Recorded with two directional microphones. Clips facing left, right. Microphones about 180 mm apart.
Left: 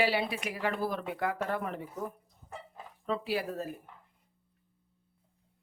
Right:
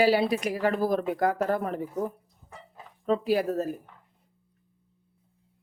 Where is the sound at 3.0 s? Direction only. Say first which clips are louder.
Right 8 dB; 45° right (ahead or behind).